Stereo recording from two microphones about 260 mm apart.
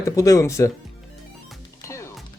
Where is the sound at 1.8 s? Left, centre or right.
Centre.